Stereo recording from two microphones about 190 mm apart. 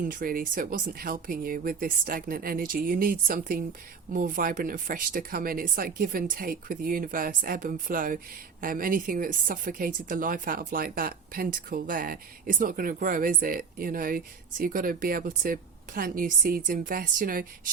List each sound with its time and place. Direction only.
0.0 s speech: 45° right (ahead or behind)